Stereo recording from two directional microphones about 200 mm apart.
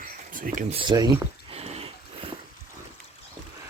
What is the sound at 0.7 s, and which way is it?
Speech, 25° right (ahead or behind).